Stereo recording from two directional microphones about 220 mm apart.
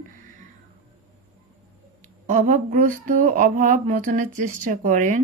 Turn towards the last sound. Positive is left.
turn(degrees=-35)  # may be behind; listen again after turning